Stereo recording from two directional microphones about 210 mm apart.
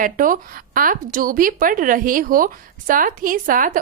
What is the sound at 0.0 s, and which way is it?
A woman's voice, 40° right (ahead or behind).